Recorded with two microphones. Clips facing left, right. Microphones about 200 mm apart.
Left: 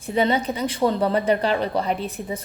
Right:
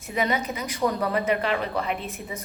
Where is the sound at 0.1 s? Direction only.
30° left (ahead or behind).